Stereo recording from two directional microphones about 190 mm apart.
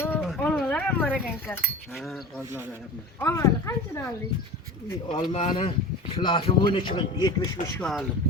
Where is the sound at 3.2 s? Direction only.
15° left (ahead or behind).